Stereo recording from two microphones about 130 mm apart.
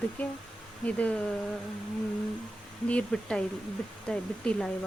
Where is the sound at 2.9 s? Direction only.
10° left (ahead or behind).